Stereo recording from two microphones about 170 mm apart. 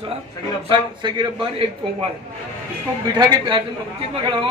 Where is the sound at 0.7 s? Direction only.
25° right (ahead or behind).